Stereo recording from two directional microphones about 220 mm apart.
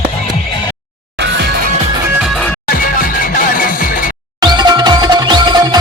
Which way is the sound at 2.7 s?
40° left (ahead or behind).